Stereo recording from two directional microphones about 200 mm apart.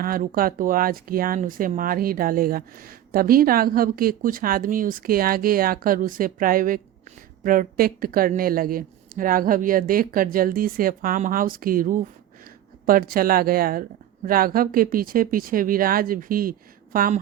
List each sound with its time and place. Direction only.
0.0 s speech: 45° right (ahead or behind)